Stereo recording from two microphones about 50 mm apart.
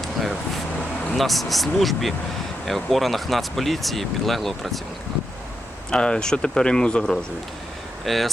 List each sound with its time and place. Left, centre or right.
1.1 s speech: centre
5.9 s speech: centre
8.0 s speech: centre